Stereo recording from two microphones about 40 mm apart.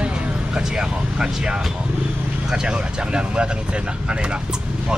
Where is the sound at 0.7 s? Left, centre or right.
Centre.